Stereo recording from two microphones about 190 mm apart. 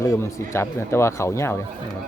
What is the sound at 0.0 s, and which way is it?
Speech, 15° left (ahead or behind).